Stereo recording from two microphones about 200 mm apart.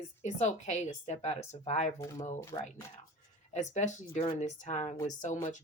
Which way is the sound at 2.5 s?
25° left (ahead or behind).